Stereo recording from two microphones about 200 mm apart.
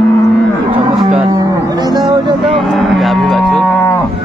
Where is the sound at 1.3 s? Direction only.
20° right (ahead or behind).